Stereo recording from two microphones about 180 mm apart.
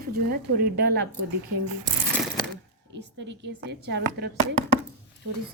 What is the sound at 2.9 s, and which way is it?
A woman's voice, 80° right.